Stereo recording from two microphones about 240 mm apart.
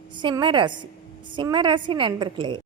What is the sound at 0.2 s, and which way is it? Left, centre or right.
A woman's voice, centre.